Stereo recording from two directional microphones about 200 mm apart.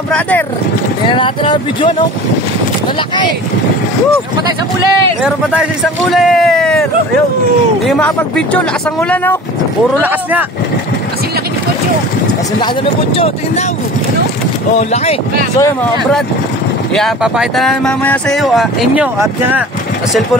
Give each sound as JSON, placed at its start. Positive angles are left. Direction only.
{"t": 1.0, "sound": "speech", "side_deg": 25}
{"t": 5.2, "sound": "speech", "side_deg": -5}
{"t": 9.1, "sound": "speech", "side_deg": 10}
{"t": 13.1, "sound": "speech", "side_deg": 30}
{"t": 14.8, "sound": "speech", "side_deg": 35}
{"t": 16.9, "sound": "speech", "side_deg": 0}